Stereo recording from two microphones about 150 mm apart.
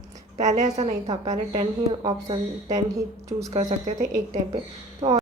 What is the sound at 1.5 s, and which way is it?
Speech, 35° right (ahead or behind).